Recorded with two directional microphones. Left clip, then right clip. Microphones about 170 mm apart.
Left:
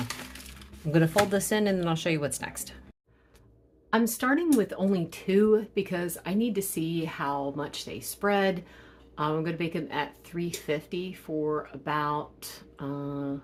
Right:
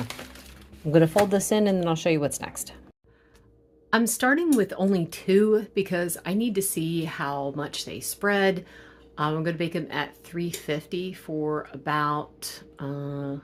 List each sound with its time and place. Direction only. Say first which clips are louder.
0.9 s speech: right 4 dB; 25° right (ahead or behind)
3.8 s speech: right 4 dB; 30° right (ahead or behind)